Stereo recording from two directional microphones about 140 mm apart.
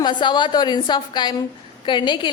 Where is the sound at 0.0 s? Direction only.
35° left (ahead or behind).